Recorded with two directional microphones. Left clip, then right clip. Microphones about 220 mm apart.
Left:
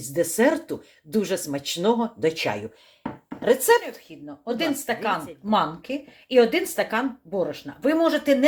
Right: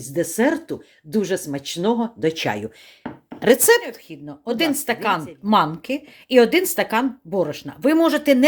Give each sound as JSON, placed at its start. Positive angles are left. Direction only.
{"t": 0.1, "sound": "speech", "side_deg": -20}
{"t": 3.4, "sound": "a woman's voice", "side_deg": -45}